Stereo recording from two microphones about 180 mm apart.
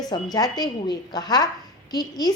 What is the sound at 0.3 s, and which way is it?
A woman's voice, 20° left (ahead or behind).